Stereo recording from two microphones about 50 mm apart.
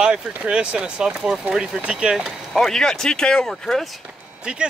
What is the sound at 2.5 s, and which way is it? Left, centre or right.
Speech, centre.